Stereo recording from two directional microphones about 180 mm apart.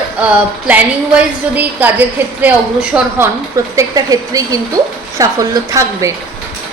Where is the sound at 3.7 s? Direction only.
20° right (ahead or behind).